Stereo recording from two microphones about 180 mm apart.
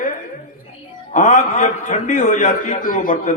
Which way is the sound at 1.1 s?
45° left (ahead or behind).